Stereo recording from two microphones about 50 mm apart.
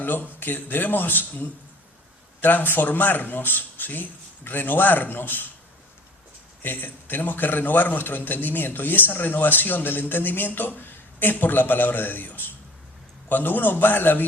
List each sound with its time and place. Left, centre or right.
0.0 s a man's voice: left
6.6 s a man's voice: left